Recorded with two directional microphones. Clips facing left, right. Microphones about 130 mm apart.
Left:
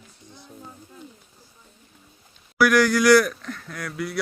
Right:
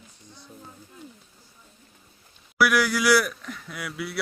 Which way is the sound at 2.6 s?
5° right (ahead or behind).